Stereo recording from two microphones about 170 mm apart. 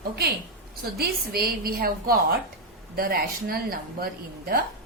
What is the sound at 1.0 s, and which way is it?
A woman's voice, 65° right (ahead or behind).